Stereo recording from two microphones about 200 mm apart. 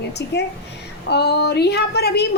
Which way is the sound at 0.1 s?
55° left (ahead or behind).